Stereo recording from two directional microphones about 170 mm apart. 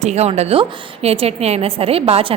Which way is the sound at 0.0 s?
40° right (ahead or behind).